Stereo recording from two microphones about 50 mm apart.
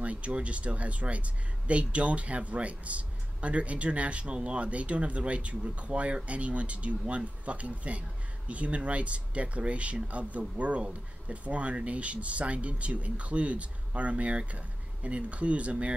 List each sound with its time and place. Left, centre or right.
0.0 s speech: right